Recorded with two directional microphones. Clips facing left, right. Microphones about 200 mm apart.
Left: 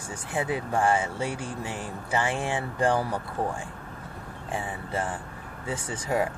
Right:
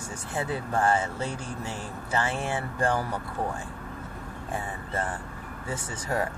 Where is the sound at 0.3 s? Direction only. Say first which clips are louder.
Left 2 dB; 15° left (ahead or behind).